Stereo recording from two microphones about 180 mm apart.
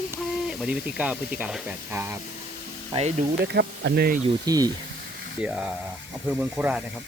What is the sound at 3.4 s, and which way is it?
Speech, 70° right (ahead or behind).